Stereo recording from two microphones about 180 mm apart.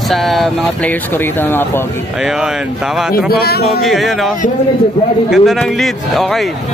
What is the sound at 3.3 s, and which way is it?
Speech, 60° left (ahead or behind).